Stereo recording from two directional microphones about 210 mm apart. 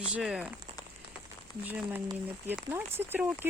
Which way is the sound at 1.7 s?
10° right (ahead or behind).